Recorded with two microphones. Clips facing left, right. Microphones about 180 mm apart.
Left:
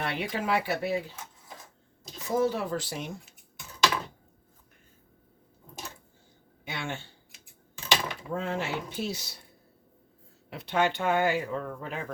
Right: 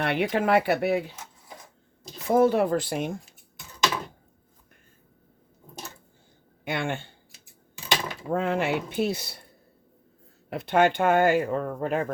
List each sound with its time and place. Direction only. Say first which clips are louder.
0.0 s speech: right 7 dB; 60° right (ahead or behind)
2.2 s speech: right 7 dB; 60° right (ahead or behind)
6.7 s speech: right 7 dB; 55° right (ahead or behind)
8.3 s speech: right 7 dB; 60° right (ahead or behind)
10.5 s speech: right 6 dB; 50° right (ahead or behind)